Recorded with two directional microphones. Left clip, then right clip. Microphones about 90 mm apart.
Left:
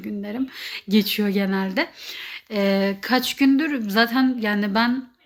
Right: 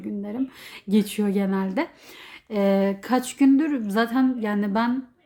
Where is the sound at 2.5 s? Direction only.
45° right (ahead or behind).